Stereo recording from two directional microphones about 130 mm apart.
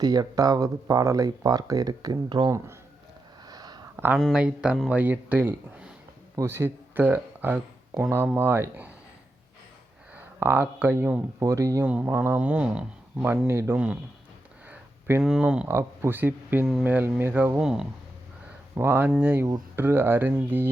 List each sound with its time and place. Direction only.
0.0 s speech: 30° right (ahead or behind)
3.4 s a sound: 30° right (ahead or behind)
3.9 s a sound: 15° right (ahead or behind)
4.2 s speech: 5° right (ahead or behind)
10.4 s speech: 15° right (ahead or behind)
13.5 s speech: 20° right (ahead or behind)
13.7 s speech: 10° right (ahead or behind)
14.7 s a sound: 20° right (ahead or behind)
15.2 s speech: 5° right (ahead or behind)
15.6 s speech: 20° right (ahead or behind)
17.6 s speech: 5° right (ahead or behind)
18.7 s speech: 20° right (ahead or behind)